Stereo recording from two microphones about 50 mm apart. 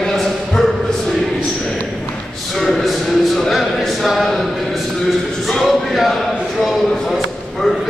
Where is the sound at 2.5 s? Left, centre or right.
Centre.